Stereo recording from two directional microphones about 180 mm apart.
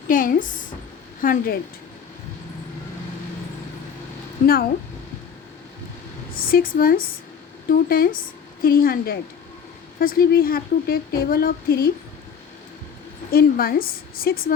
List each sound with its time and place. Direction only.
0.1 s a woman's voice: 50° left (ahead or behind)
6.3 s a woman's voice: 55° left (ahead or behind)
13.3 s speech: 55° left (ahead or behind)